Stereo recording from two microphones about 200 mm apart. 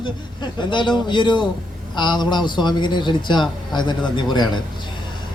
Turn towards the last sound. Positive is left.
turn(degrees=20)  # may be behind; listen again after turning